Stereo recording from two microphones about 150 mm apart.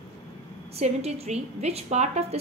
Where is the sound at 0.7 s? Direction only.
45° right (ahead or behind).